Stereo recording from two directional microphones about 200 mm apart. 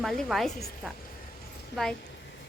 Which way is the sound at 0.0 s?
Centre (ahead or behind).